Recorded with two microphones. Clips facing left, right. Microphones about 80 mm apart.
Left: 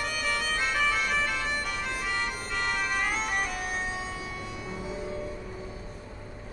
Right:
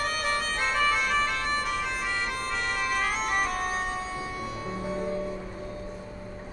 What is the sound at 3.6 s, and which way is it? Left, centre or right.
Music, right.